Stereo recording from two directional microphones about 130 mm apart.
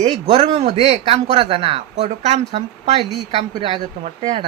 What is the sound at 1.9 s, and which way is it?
Speech, 60° right (ahead or behind).